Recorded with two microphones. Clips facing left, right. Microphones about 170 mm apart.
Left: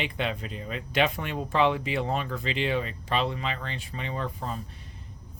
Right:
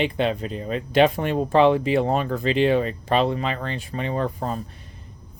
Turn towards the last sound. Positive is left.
turn(degrees=-45)  # may be behind; listen again after turning